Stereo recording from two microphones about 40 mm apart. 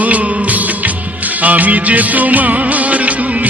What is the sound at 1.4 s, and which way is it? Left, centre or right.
Music, right.